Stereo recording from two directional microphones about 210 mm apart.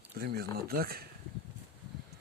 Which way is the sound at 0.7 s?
45° right (ahead or behind).